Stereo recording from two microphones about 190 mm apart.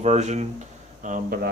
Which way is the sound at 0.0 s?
35° right (ahead or behind).